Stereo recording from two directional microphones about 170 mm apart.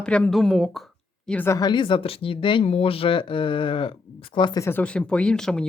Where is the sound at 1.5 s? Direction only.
25° left (ahead or behind).